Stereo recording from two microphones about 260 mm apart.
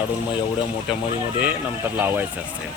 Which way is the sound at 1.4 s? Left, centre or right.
Centre.